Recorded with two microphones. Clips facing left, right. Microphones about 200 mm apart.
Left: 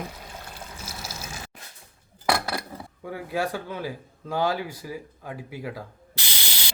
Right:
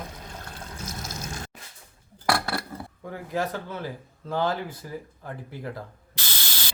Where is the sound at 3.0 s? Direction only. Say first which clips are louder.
Left 1 dB; 10° left (ahead or behind).